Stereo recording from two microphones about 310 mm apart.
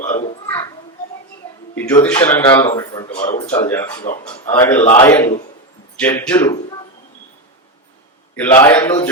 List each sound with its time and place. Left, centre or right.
0.3 s a sound: centre
1.7 s a man's voice: centre
8.4 s a man's voice: centre